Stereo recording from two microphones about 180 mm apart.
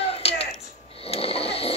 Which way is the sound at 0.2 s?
35° left (ahead or behind).